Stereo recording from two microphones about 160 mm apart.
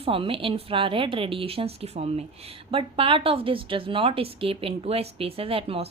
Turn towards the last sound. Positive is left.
turn(degrees=-35)  # may be behind; listen again after turning